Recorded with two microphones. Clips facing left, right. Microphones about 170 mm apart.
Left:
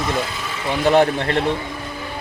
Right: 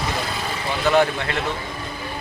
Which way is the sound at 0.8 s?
35° left (ahead or behind).